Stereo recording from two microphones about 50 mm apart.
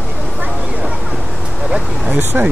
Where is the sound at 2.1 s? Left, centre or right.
Right.